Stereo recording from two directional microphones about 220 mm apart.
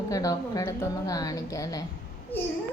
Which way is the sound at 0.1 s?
15° left (ahead or behind).